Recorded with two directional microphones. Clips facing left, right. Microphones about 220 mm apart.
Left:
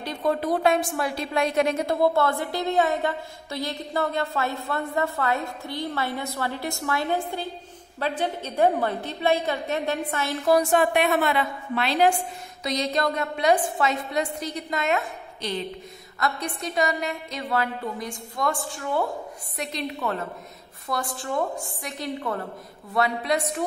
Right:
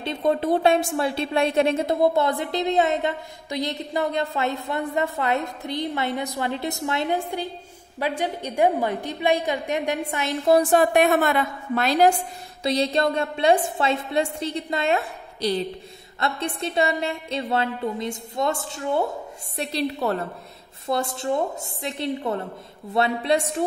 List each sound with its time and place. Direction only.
0.0 s a woman's voice: 25° right (ahead or behind); by 12.1 s 45° right (ahead or behind)
12.6 s a woman's voice: 30° right (ahead or behind)
20.8 s a woman's voice: 25° right (ahead or behind)